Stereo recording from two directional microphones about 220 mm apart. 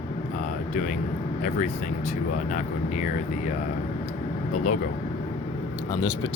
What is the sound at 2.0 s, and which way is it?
Speech, 35° left (ahead or behind).